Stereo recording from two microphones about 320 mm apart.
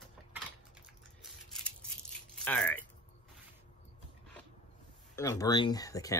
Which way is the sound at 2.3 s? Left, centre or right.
Centre.